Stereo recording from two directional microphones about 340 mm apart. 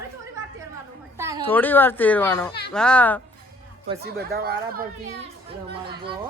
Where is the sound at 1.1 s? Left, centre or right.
Centre.